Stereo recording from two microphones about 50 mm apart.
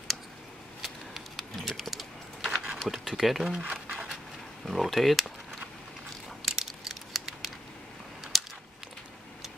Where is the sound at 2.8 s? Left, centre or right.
Centre.